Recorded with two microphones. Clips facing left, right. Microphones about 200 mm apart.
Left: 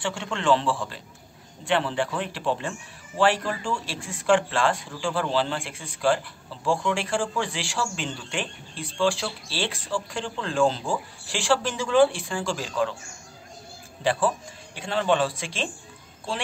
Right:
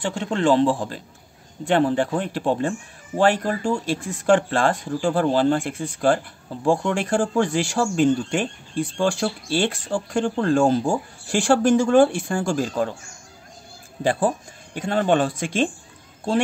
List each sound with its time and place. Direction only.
0.0 s a man's voice: 40° right (ahead or behind)
14.0 s speech: 45° right (ahead or behind)